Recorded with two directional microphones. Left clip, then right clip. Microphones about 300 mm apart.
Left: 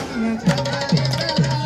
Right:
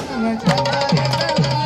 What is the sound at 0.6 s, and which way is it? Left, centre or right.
Music, right.